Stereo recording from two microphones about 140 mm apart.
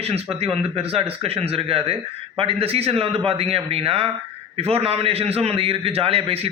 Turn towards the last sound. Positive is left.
turn(degrees=-45)  # may be behind; listen again after turning